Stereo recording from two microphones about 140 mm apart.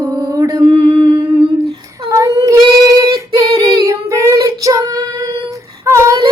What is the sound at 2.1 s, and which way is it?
Child singing, 25° right (ahead or behind).